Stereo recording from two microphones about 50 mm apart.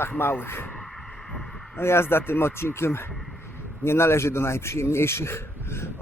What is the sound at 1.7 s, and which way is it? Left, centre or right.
A man's voice, left.